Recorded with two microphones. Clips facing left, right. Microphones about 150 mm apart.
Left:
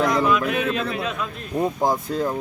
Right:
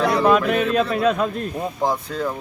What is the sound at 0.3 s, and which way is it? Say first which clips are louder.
Speech: right 4 dB; 45° right (ahead or behind).